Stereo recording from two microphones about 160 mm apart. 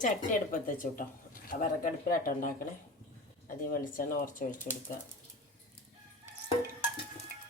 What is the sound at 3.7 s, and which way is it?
Speech, 60° left (ahead or behind).